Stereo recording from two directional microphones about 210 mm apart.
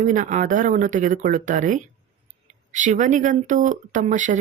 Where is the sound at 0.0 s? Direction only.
35° right (ahead or behind).